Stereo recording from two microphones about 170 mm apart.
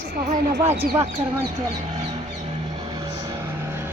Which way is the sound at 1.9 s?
40° right (ahead or behind).